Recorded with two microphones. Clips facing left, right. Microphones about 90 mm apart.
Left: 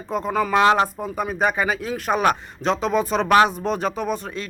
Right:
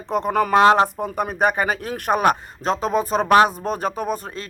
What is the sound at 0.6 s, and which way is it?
Speech, 40° right (ahead or behind).